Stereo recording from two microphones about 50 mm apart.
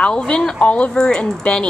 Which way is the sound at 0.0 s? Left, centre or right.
Centre.